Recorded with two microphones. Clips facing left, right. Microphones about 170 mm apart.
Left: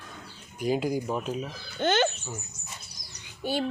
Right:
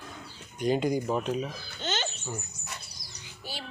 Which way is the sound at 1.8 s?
55° left (ahead or behind).